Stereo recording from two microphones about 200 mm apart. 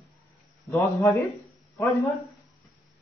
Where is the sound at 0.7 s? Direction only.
15° left (ahead or behind).